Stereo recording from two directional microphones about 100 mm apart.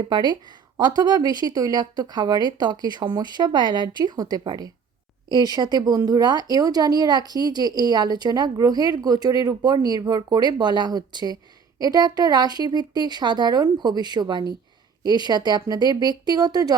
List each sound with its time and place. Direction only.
0.0 s speech: 45° right (ahead or behind)